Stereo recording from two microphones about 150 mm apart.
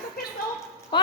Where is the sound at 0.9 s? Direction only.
30° left (ahead or behind).